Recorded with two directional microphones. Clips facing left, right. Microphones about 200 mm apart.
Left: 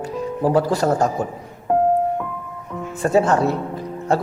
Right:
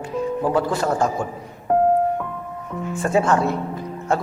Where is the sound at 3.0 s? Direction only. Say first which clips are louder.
Left 2 dB; 35° left (ahead or behind).